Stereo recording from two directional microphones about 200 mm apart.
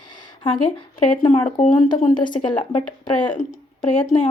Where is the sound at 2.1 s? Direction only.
25° left (ahead or behind).